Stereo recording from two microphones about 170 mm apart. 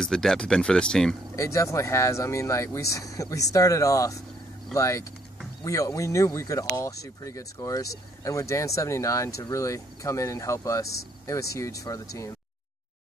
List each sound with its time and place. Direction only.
0.0 s speech: 5° left (ahead or behind)
1.3 s speech: 20° left (ahead or behind)